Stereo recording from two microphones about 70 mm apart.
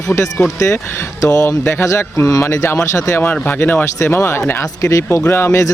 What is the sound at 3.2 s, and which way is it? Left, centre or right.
Speech, left.